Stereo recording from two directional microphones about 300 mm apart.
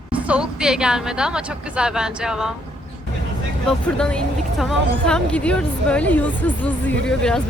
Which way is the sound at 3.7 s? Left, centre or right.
Centre.